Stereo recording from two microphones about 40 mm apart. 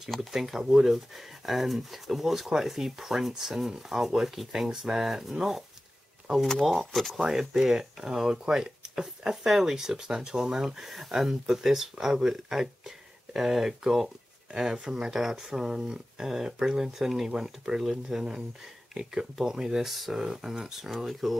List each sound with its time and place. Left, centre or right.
0.3 s speech: centre
6.7 s speech: centre
7.7 s speech: centre
19.3 s speech: centre